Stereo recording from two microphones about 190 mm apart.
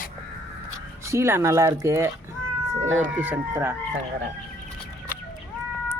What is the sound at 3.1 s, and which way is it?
Speech, 5° right (ahead or behind).